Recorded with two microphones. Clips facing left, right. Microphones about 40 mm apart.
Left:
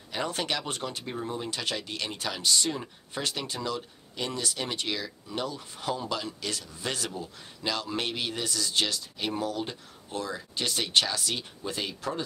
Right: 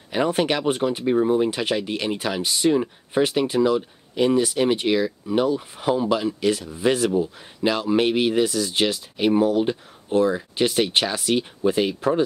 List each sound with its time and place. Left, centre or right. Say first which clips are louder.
0.1 s speech: right 10 dB; right